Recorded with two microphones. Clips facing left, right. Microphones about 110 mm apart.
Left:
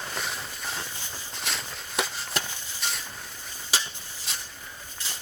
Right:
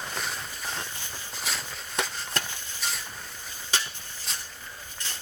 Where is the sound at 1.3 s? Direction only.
Centre (ahead or behind).